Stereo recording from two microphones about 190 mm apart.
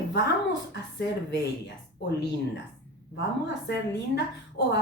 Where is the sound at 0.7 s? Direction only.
65° left (ahead or behind).